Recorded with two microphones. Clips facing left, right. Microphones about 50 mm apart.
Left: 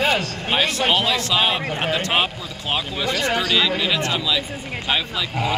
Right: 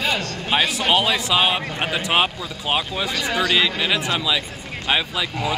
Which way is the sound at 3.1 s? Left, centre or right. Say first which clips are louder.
Left 3 dB; left.